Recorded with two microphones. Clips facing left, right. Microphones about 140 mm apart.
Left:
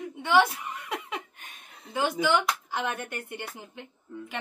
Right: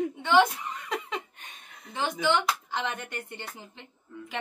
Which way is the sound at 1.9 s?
5° left (ahead or behind).